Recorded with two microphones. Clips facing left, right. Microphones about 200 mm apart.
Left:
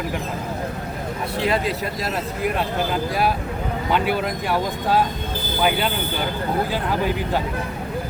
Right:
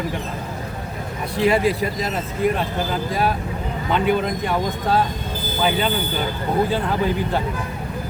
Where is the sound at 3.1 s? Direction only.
10° left (ahead or behind).